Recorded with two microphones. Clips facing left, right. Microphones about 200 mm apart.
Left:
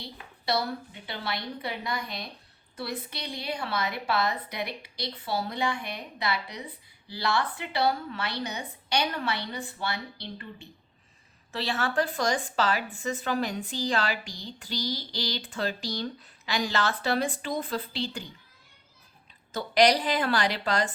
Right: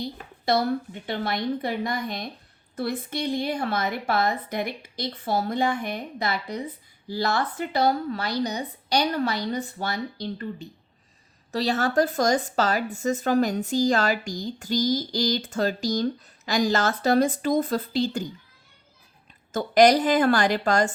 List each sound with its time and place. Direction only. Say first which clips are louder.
0.0 s a woman's voice: right 7 dB; 50° right (ahead or behind)
19.5 s speech: right 5 dB; 50° right (ahead or behind)